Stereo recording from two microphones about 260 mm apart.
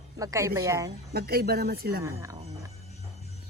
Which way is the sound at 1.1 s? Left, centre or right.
Right.